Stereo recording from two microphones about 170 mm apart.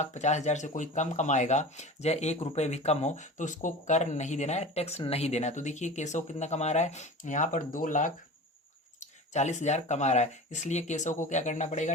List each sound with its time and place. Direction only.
0.0 s speech: 45° left (ahead or behind)